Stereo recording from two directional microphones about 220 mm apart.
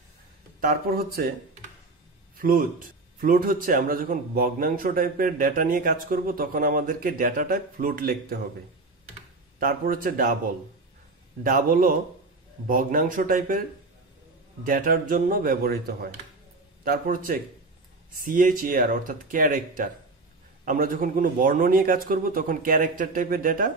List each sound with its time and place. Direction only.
0.6 s speech: 40° right (ahead or behind)
2.3 s a man's voice: 40° right (ahead or behind)
9.6 s a man's voice: 40° right (ahead or behind)
11.4 s a man's voice: 40° right (ahead or behind)